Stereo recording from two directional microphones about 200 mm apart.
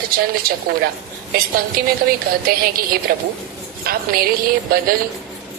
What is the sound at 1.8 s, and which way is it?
A woman's voice, 45° right (ahead or behind).